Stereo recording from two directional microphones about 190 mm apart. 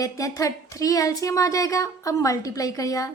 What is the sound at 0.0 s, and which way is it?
Speech, 15° left (ahead or behind).